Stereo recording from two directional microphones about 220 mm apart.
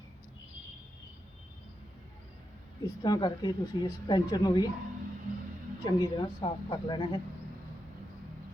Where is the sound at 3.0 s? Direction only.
20° left (ahead or behind).